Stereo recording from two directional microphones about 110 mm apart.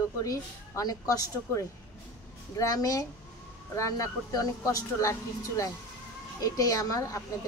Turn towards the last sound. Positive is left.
turn(degrees=35)  # may be behind; listen again after turning